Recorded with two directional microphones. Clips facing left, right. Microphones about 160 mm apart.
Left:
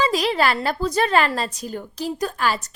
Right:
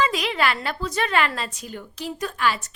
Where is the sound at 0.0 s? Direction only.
35° left (ahead or behind).